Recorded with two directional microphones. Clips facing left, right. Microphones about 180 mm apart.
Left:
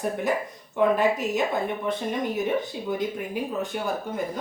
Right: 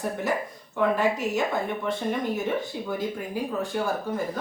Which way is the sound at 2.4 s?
20° left (ahead or behind).